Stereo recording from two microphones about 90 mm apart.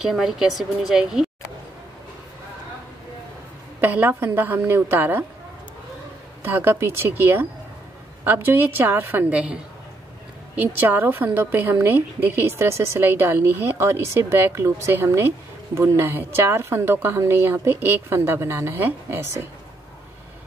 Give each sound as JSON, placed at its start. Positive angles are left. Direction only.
{"t": 0.0, "sound": "speech", "side_deg": -5}
{"t": 3.8, "sound": "a woman's voice", "side_deg": -20}
{"t": 6.4, "sound": "a woman's voice", "side_deg": -25}